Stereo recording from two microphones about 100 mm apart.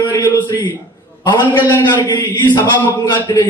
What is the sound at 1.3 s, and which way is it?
A man's voice, 50° left (ahead or behind).